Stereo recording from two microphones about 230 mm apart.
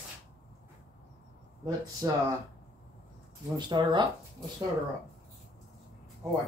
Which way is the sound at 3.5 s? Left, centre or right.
Centre.